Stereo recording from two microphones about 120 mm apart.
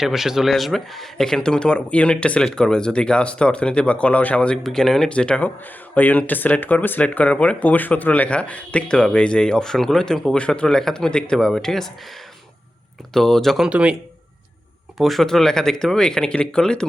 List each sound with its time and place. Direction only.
0.0 s speech: 5° right (ahead or behind)
13.1 s speech: 5° left (ahead or behind)
13.7 s speech: 10° right (ahead or behind)
14.9 s speech: centre (ahead or behind)